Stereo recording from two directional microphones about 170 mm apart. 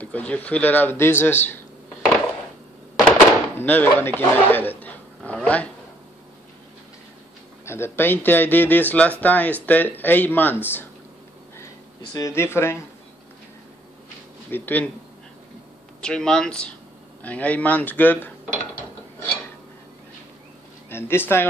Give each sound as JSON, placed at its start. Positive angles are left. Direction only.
{"t": 0.0, "sound": "speech", "side_deg": 10}
{"t": 3.1, "sound": "speech", "side_deg": 10}
{"t": 7.6, "sound": "speech", "side_deg": 15}
{"t": 12.0, "sound": "speech", "side_deg": 20}
{"t": 14.5, "sound": "speech", "side_deg": 10}
{"t": 16.0, "sound": "speech", "side_deg": 5}
{"t": 20.9, "sound": "speech", "side_deg": 15}